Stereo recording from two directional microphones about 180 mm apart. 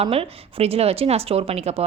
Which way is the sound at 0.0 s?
30° right (ahead or behind).